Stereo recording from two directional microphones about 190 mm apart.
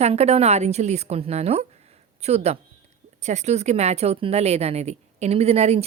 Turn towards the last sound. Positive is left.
turn(degrees=-35)  # may be behind; listen again after turning